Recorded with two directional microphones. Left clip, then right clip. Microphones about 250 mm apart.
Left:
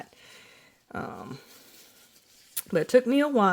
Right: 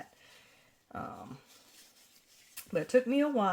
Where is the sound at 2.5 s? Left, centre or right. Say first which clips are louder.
Left 6 dB; left.